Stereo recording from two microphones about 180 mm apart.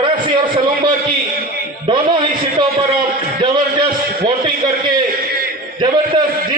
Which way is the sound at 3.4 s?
25° right (ahead or behind).